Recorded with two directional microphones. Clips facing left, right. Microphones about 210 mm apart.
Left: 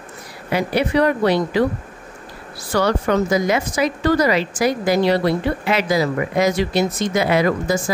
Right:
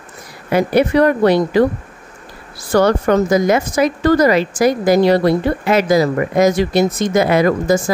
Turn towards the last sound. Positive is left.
turn(degrees=-45)  # may be behind; listen again after turning